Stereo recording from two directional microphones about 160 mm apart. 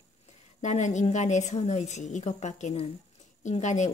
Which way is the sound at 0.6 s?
50° left (ahead or behind).